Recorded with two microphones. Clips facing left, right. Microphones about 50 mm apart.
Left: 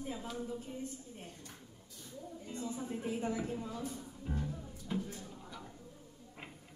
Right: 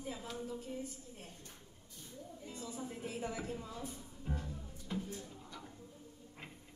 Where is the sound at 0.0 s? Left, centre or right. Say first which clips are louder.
Left 3 dB; centre.